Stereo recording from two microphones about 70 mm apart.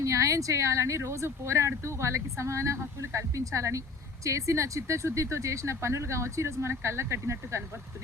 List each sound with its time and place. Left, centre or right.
0.0 s speech: right